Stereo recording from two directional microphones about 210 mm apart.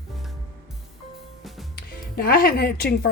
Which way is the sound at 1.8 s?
45° left (ahead or behind).